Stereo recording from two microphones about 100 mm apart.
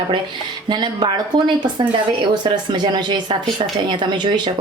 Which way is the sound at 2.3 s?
50° right (ahead or behind).